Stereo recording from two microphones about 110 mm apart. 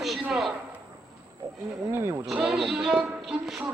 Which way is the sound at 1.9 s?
25° right (ahead or behind).